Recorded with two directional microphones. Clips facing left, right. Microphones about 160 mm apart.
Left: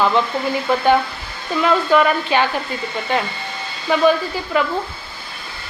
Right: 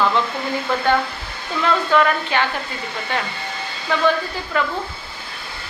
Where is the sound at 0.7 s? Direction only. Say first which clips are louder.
Left 4 dB; 15° left (ahead or behind).